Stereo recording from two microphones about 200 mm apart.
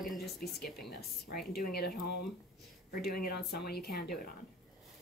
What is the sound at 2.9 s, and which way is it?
Speech, 50° left (ahead or behind).